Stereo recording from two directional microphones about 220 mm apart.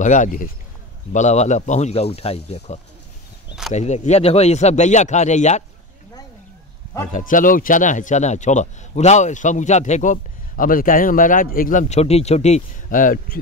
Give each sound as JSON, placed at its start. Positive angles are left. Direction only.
{"t": 0.0, "sound": "speech", "side_deg": 35}
{"t": 7.1, "sound": "speech", "side_deg": 35}